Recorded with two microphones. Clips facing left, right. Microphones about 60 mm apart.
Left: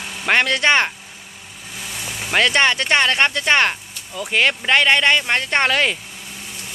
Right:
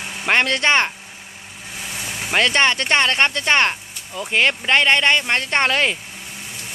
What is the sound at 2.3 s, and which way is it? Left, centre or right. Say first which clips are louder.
Speech: left 1 dB; centre.